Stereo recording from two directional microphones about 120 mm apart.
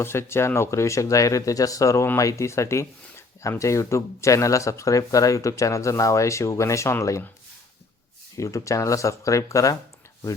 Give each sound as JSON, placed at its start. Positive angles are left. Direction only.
{"t": 0.0, "sound": "speech", "side_deg": 20}
{"t": 8.4, "sound": "speech", "side_deg": 25}